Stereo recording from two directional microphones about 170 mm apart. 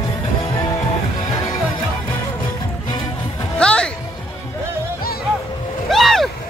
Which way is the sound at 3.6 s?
5° left (ahead or behind).